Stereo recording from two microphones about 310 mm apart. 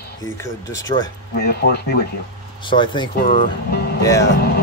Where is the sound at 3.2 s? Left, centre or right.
Left.